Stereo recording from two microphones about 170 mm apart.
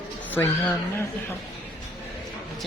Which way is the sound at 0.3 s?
10° left (ahead or behind).